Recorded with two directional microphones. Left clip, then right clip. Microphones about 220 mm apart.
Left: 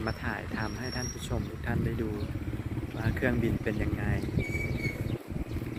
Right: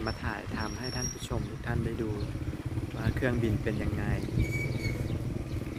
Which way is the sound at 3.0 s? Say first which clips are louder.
Left 1 dB; centre (ahead or behind).